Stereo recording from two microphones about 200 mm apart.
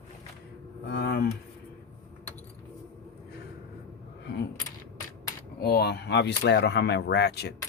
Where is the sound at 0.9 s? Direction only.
50° left (ahead or behind).